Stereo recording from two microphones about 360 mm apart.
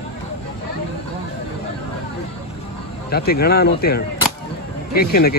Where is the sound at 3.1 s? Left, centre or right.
Left.